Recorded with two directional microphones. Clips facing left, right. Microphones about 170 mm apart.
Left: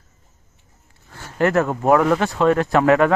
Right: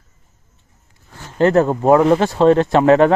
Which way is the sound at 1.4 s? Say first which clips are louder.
Right 5 dB; 30° right (ahead or behind).